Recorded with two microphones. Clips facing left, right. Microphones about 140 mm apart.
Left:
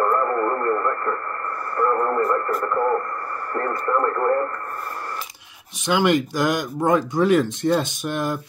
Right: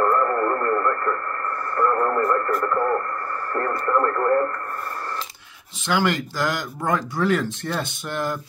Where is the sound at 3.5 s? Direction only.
15° left (ahead or behind).